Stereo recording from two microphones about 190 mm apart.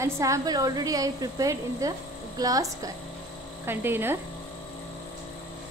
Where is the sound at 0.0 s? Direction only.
15° right (ahead or behind).